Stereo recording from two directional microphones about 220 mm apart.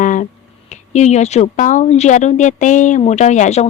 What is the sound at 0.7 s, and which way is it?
A woman's voice, 30° left (ahead or behind).